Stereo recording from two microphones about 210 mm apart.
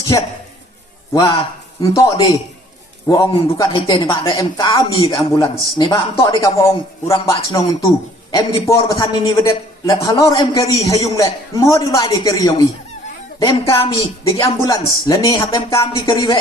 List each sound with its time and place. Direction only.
1.1 s a man's voice: 15° left (ahead or behind)